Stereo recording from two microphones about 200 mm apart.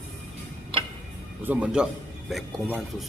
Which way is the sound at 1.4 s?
5° right (ahead or behind).